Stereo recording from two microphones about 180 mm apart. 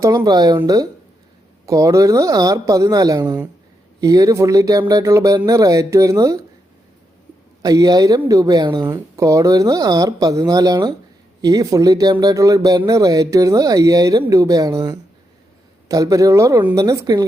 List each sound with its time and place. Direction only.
0.0 s speech: 20° right (ahead or behind)
7.6 s speech: 20° right (ahead or behind)